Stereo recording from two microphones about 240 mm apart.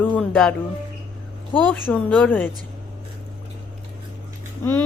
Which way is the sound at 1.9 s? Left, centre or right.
Centre.